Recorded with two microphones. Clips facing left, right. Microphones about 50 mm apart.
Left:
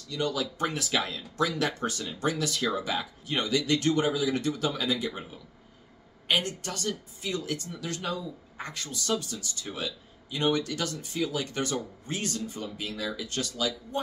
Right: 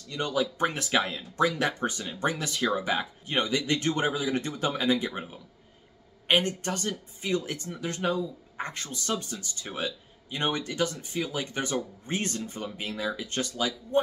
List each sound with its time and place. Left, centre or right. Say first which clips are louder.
0.1 s speech: right 2 dB; right
6.2 s speech: right 3 dB; right